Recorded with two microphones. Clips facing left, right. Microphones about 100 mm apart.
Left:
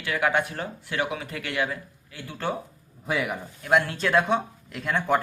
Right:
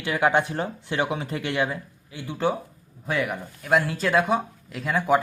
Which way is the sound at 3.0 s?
Centre (ahead or behind).